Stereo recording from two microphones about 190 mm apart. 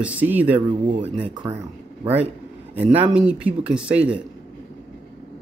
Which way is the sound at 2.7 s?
10° right (ahead or behind).